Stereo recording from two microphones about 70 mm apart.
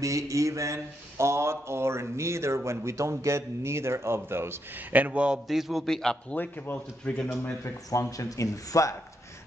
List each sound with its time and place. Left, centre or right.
0.0 s speech: right
4.9 s a man's voice: right
5.5 s a man's voice: centre
6.3 s a man's voice: left
7.6 s speech: left